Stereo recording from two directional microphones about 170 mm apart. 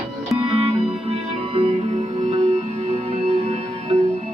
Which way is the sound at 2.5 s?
40° right (ahead or behind).